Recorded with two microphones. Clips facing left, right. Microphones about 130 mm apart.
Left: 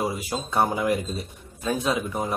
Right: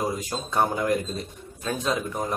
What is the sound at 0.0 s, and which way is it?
A man's voice, 5° left (ahead or behind).